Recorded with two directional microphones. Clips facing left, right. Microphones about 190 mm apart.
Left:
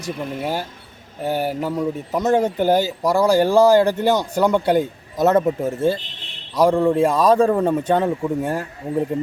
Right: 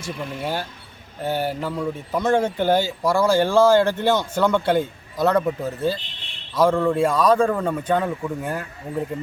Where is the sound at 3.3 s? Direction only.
40° left (ahead or behind).